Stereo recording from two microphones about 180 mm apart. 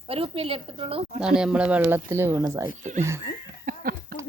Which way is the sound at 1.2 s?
5° right (ahead or behind).